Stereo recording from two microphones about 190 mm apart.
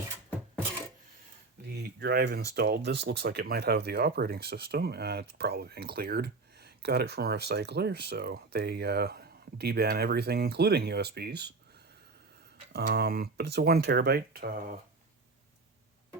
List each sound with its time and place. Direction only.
1.8 s speech: 60° right (ahead or behind)
12.7 s speech: 60° right (ahead or behind)